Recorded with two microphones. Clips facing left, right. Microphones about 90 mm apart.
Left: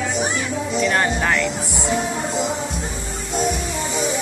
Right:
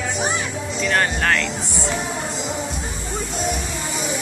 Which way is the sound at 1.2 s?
10° left (ahead or behind).